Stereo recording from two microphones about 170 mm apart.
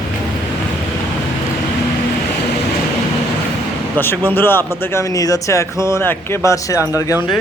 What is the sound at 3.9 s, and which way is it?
Speech, 10° left (ahead or behind).